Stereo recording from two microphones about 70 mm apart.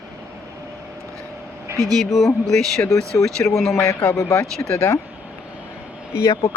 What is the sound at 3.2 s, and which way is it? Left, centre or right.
Speech, left.